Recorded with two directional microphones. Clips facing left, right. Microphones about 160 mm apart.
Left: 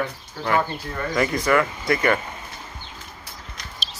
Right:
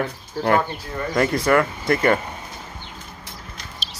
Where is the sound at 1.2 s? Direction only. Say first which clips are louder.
Right 2 dB; 45° right (ahead or behind).